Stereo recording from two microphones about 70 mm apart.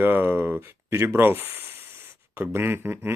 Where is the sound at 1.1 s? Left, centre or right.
Right.